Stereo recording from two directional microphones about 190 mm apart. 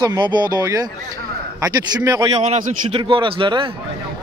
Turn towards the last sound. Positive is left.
turn(degrees=-25)  # may be behind; listen again after turning